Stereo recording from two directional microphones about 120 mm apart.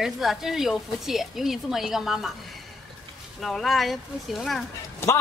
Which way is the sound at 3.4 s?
Centre (ahead or behind).